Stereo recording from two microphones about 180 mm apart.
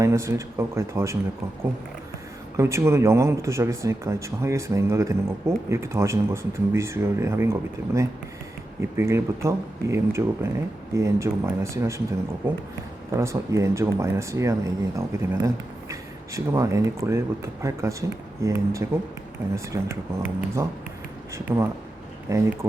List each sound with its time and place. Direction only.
0.0 s speech: 15° right (ahead or behind)
2.6 s speech: 15° right (ahead or behind)
13.1 s speech: 15° right (ahead or behind)